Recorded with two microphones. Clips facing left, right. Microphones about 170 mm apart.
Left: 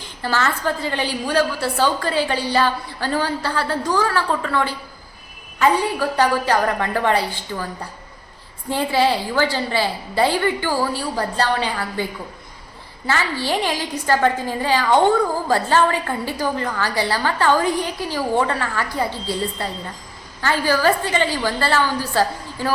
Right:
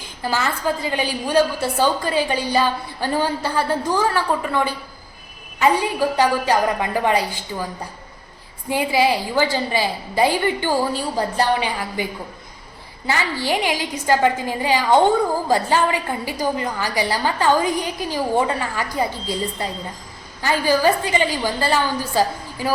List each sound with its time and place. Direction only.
0.2 s a woman's voice: 15° right (ahead or behind)
8.7 s a woman's voice: 10° right (ahead or behind)
13.1 s a woman's voice: 15° right (ahead or behind)